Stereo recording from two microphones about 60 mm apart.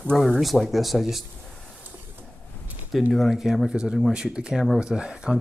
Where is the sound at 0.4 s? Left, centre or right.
Centre.